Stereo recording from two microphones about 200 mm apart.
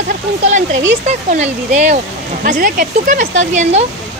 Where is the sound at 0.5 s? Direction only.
35° right (ahead or behind).